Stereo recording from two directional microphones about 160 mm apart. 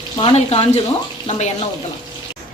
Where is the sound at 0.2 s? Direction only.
35° left (ahead or behind).